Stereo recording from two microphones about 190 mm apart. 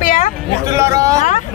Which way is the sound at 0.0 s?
45° left (ahead or behind).